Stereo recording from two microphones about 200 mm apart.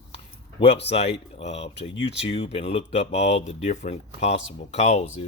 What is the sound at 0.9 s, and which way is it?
Speech, 30° left (ahead or behind).